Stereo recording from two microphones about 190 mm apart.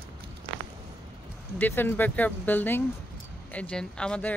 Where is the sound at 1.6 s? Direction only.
10° left (ahead or behind).